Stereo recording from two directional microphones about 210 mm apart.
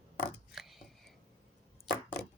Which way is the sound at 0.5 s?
Centre (ahead or behind).